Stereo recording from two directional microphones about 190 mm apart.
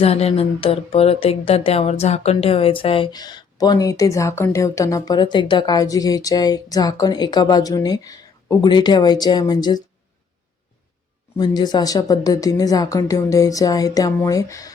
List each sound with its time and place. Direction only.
0.0 s speech: 30° left (ahead or behind)
11.3 s speech: 20° left (ahead or behind)